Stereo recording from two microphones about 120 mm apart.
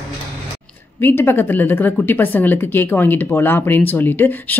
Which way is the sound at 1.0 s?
20° left (ahead or behind).